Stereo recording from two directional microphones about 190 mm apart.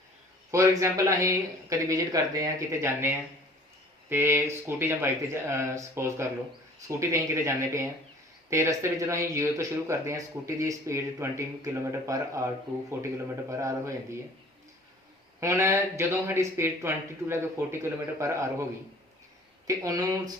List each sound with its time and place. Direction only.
0.5 s speech: 15° right (ahead or behind)
13.5 s speech: 15° right (ahead or behind)
15.4 s speech: 15° right (ahead or behind)
19.6 s speech: 15° right (ahead or behind)